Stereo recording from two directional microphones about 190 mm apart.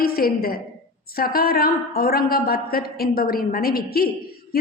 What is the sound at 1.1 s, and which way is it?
A woman's voice, 50° left (ahead or behind).